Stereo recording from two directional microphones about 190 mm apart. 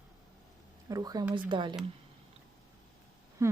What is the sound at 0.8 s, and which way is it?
Speech, 20° right (ahead or behind).